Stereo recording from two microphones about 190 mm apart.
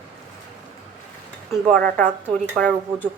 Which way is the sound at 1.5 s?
5° left (ahead or behind).